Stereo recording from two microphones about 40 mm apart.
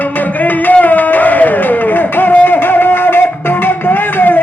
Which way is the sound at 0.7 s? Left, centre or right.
Left.